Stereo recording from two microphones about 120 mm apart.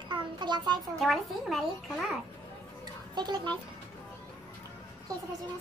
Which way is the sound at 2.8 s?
35° right (ahead or behind).